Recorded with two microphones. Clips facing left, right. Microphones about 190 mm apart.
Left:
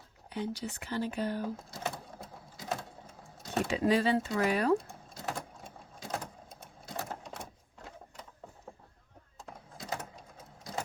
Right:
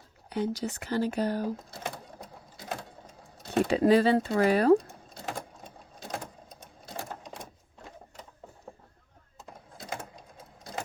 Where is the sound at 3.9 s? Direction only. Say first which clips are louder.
Right 5 dB; 40° right (ahead or behind).